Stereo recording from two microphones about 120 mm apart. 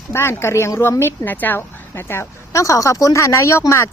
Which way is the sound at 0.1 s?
20° left (ahead or behind).